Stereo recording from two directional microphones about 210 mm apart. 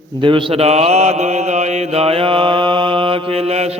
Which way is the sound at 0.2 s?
25° right (ahead or behind).